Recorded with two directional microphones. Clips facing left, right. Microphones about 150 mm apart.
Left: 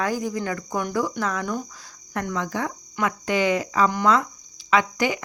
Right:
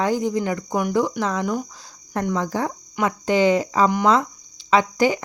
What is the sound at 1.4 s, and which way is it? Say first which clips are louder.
Speech: right 4 dB; 10° right (ahead or behind).